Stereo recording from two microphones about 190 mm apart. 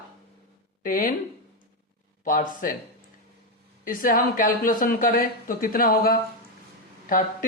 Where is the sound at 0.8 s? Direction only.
45° left (ahead or behind).